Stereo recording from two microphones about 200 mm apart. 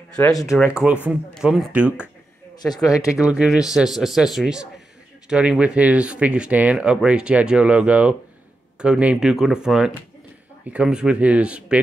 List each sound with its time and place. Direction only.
0.3 s speech: 15° left (ahead or behind)
0.6 s speech: 5° right (ahead or behind)
3.2 s speech: 5° right (ahead or behind)